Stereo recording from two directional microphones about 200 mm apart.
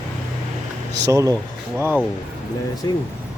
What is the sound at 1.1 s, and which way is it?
Speech, 15° right (ahead or behind).